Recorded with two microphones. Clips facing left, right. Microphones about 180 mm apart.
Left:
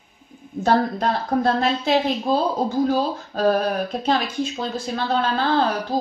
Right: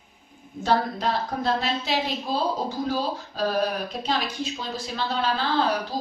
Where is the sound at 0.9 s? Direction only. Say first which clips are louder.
Left 5 dB; 50° left (ahead or behind).